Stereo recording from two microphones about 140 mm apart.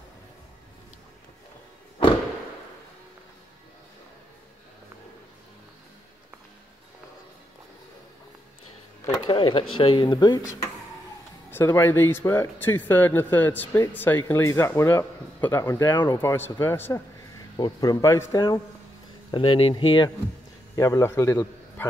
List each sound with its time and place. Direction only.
9.0 s speech: 40° left (ahead or behind)
11.5 s speech: 15° left (ahead or behind)
17.6 s speech: 30° left (ahead or behind)
19.3 s speech: 35° left (ahead or behind)
20.7 s a man's voice: 20° left (ahead or behind)